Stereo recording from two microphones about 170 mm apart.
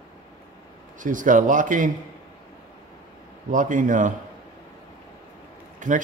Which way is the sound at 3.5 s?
50° right (ahead or behind).